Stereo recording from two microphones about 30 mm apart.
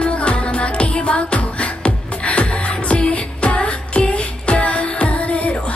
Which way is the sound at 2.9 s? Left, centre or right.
Left.